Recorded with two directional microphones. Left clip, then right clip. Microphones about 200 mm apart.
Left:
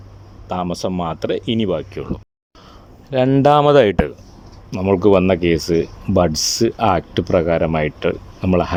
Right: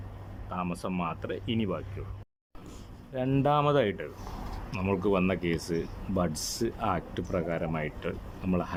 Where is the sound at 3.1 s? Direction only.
55° left (ahead or behind).